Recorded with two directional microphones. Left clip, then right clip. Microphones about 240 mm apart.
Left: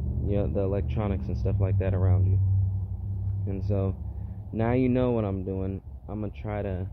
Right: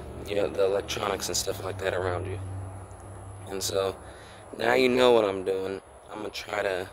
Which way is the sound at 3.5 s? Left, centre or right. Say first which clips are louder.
Right 5 dB; right.